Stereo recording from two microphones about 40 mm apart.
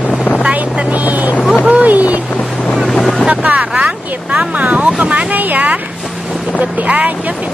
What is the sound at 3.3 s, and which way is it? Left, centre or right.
Boat, right.